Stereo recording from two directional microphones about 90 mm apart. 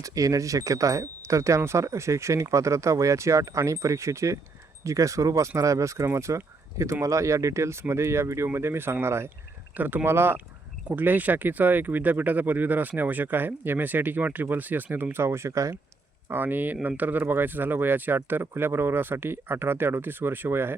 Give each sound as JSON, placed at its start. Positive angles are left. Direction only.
{"t": 0.0, "sound": "speech", "side_deg": -40}
{"t": 15.1, "sound": "speech", "side_deg": -30}
{"t": 16.3, "sound": "speech", "side_deg": -20}